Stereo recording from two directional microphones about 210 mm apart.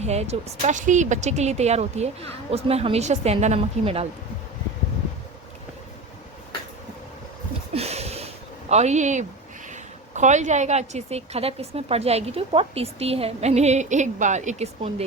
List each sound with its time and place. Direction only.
0.0 s speech: 30° right (ahead or behind)
7.7 s a sound: 30° right (ahead or behind)
8.7 s a woman's voice: 35° right (ahead or behind)